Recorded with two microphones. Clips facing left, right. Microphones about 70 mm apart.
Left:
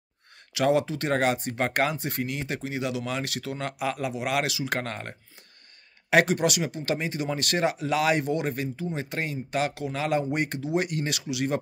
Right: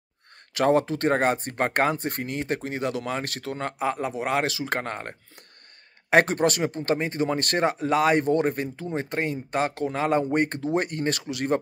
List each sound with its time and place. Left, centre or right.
0.6 s speech: right